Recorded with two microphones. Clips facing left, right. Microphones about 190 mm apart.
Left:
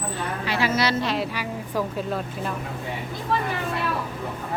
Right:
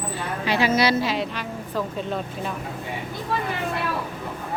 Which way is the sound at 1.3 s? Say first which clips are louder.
Left 1 dB; 10° left (ahead or behind).